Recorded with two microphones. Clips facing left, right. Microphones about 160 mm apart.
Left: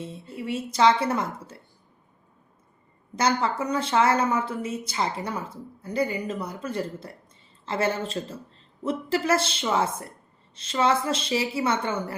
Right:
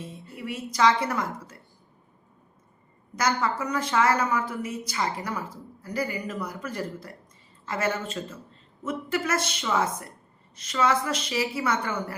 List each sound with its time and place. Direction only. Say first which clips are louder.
0.0 s a woman's voice: left 3 dB; 25° left (ahead or behind)
3.2 s a woman's voice: left 2 dB; 30° left (ahead or behind)